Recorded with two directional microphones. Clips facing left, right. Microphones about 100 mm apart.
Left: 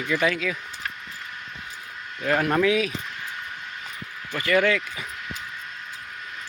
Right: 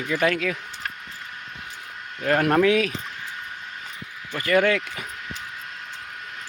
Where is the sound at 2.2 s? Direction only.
50° right (ahead or behind).